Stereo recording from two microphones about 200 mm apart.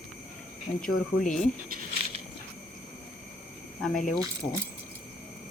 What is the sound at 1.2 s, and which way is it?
Speech, 40° left (ahead or behind).